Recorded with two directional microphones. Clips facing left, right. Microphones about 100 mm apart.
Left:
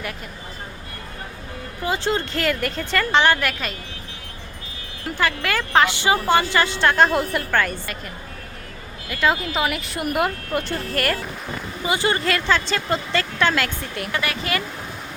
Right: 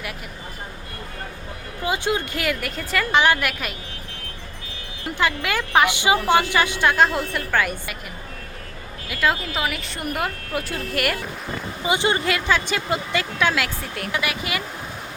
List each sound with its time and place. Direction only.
1.8 s a woman's voice: 15° right (ahead or behind)
5.0 s a woman's voice: 20° right (ahead or behind)
6.9 s speech: centre (ahead or behind)
7.5 s a woman's voice: 10° right (ahead or behind)
9.0 s speech: centre (ahead or behind)
11.9 s a woman's voice: 20° right (ahead or behind)